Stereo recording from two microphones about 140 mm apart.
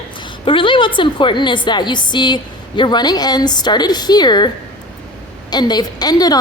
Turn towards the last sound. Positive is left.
turn(degrees=30)  # may be behind; listen again after turning